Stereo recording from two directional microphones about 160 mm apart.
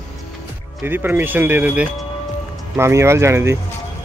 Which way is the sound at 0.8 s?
15° right (ahead or behind).